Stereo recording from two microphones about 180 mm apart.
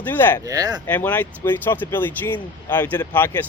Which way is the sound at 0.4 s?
20° right (ahead or behind).